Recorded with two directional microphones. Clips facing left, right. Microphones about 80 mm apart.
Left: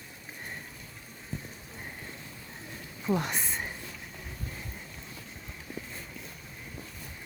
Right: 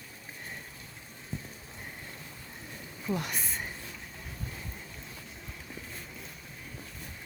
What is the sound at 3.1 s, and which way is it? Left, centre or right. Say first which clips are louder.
Speech: left 4 dB; left.